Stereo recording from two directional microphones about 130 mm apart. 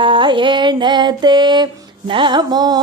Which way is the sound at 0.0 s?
40° right (ahead or behind).